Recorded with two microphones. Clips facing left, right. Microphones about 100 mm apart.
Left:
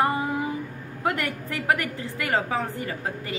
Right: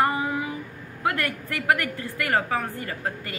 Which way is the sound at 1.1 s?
20° left (ahead or behind).